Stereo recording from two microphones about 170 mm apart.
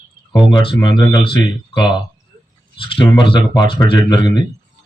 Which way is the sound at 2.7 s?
30° left (ahead or behind).